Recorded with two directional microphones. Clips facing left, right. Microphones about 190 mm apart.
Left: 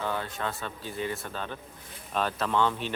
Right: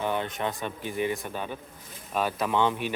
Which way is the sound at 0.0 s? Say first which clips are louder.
Right 3 dB; 20° right (ahead or behind).